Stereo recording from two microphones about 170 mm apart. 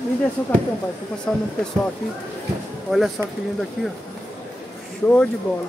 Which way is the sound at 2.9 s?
Centre (ahead or behind).